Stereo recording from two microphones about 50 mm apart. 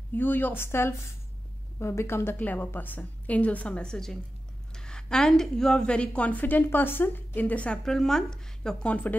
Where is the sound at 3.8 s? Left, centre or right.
Centre.